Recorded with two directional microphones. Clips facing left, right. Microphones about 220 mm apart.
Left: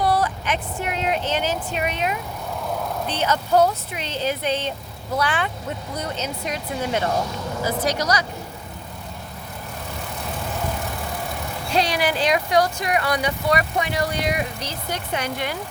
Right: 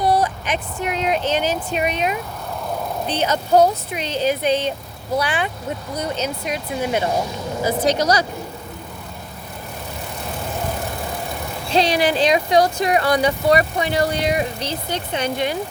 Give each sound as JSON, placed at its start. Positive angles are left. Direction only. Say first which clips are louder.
{"t": 0.0, "sound": "speech", "louder": "right 2 dB", "side_deg": -20}
{"t": 11.7, "sound": "speech", "louder": "right 4 dB", "side_deg": -25}